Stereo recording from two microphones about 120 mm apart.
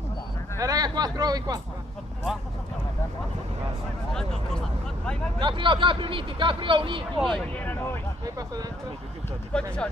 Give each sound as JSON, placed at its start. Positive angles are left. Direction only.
{"t": 0.6, "sound": "speech", "side_deg": -30}
{"t": 4.1, "sound": "speech", "side_deg": 5}
{"t": 5.4, "sound": "speech", "side_deg": -45}
{"t": 7.2, "sound": "speech", "side_deg": -5}
{"t": 7.5, "sound": "a sound", "side_deg": 15}
{"t": 9.5, "sound": "speech", "side_deg": 10}